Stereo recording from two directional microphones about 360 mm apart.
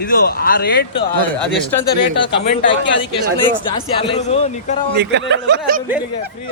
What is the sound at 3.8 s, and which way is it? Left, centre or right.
A man's voice, centre.